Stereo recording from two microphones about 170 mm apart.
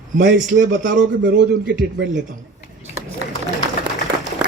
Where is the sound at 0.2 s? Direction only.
50° right (ahead or behind).